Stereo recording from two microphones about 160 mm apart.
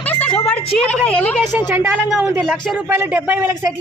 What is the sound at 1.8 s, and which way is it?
A man's voice, 10° right (ahead or behind).